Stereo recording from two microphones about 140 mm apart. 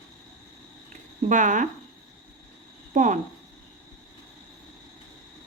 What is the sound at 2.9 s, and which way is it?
Speech, 60° right (ahead or behind).